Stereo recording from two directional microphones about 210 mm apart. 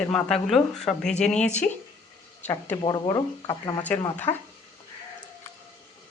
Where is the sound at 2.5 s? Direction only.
20° left (ahead or behind).